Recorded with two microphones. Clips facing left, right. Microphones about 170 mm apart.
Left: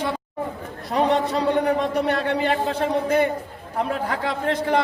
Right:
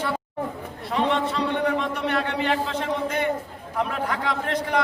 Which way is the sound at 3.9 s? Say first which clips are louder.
Left 2 dB; 30° left (ahead or behind).